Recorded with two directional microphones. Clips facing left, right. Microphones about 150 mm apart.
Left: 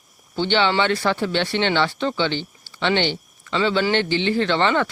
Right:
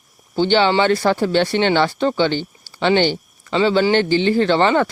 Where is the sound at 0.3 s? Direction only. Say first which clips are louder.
Right 4 dB; 40° right (ahead or behind).